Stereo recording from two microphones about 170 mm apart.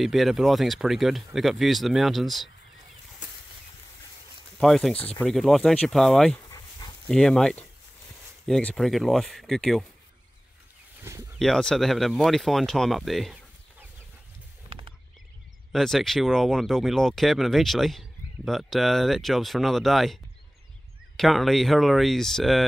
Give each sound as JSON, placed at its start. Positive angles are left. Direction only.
{"t": 0.0, "sound": "speech", "side_deg": 0}
{"t": 4.6, "sound": "speech", "side_deg": 0}
{"t": 11.3, "sound": "speech", "side_deg": 0}
{"t": 14.7, "sound": "a sound", "side_deg": -30}
{"t": 15.7, "sound": "speech", "side_deg": 0}
{"t": 21.2, "sound": "speech", "side_deg": 0}